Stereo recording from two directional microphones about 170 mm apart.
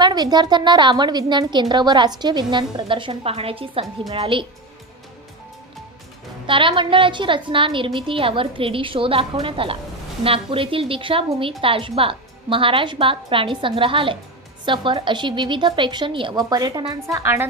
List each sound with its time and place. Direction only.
0.0 s a woman's voice: 25° right (ahead or behind)
6.4 s a woman's voice: 30° right (ahead or behind); by 17.5 s 15° right (ahead or behind)